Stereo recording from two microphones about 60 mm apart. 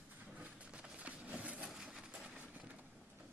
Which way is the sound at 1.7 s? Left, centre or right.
Centre.